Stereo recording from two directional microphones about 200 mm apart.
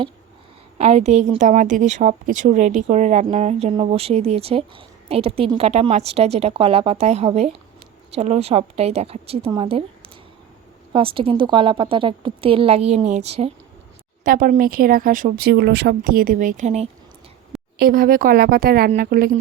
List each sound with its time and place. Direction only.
0.8 s a woman's voice: 30° right (ahead or behind)
10.9 s a woman's voice: 25° right (ahead or behind)
14.3 s speech: 45° right (ahead or behind)
17.7 s speech: 45° right (ahead or behind)